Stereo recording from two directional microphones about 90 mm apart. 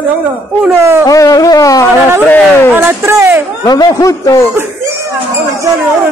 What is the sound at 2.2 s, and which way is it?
Speech, 15° left (ahead or behind).